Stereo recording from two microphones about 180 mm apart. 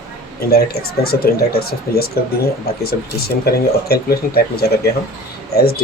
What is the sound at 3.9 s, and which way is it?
Speech, 60° left (ahead or behind).